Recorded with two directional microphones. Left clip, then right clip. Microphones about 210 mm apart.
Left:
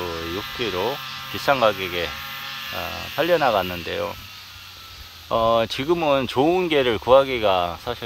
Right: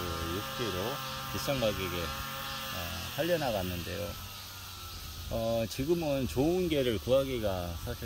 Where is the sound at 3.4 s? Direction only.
35° left (ahead or behind).